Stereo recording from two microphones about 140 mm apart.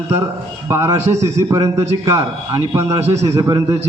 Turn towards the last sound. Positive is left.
turn(degrees=-25)  # may be behind; listen again after turning